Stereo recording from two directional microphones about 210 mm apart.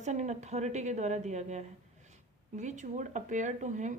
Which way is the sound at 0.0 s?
35° right (ahead or behind).